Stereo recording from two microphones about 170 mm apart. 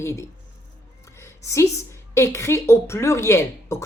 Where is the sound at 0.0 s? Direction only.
15° left (ahead or behind).